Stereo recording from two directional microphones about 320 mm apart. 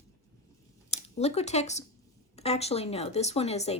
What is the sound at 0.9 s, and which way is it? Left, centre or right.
Speech, centre.